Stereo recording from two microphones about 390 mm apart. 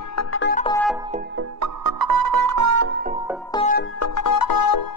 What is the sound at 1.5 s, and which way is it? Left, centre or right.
Music, right.